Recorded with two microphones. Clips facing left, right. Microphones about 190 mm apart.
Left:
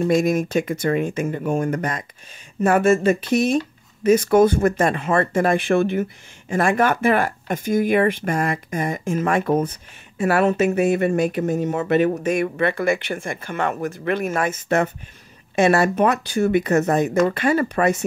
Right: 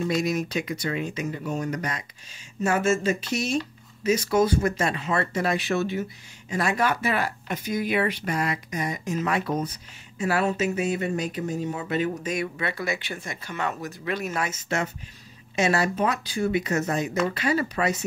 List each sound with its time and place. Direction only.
0.1 s speech: 50° left (ahead or behind)